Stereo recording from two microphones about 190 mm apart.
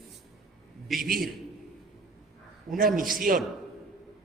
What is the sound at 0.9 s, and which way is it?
Speech, centre (ahead or behind).